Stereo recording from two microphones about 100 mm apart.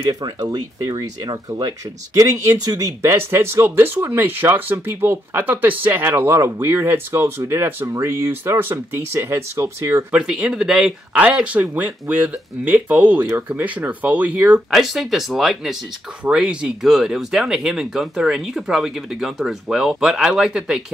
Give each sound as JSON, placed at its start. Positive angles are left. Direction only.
{"t": 0.1, "sound": "speech", "side_deg": -40}
{"t": 10.1, "sound": "speech", "side_deg": -5}
{"t": 14.7, "sound": "speech", "side_deg": 0}